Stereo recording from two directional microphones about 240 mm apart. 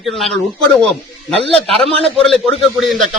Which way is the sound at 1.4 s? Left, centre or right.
Left.